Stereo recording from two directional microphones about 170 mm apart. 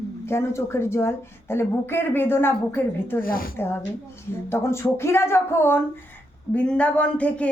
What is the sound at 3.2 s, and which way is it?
Speech, 60° left (ahead or behind).